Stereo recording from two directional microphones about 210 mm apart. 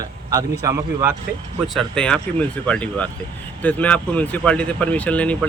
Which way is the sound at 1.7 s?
5° left (ahead or behind).